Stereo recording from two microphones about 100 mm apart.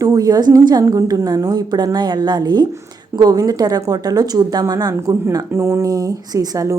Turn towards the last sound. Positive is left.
turn(degrees=-35)  # may be behind; listen again after turning